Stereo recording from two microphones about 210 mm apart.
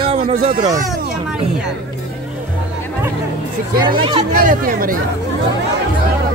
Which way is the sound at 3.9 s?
25° right (ahead or behind).